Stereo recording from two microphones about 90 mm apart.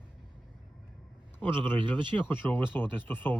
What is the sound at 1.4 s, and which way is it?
A man's voice, 25° left (ahead or behind).